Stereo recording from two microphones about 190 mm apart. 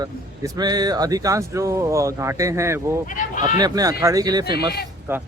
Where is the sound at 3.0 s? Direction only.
40° left (ahead or behind).